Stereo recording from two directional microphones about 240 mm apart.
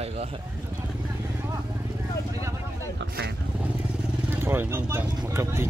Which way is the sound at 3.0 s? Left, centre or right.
Right.